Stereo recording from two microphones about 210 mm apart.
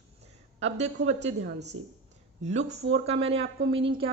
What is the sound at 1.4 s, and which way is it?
Speech, 55° right (ahead or behind).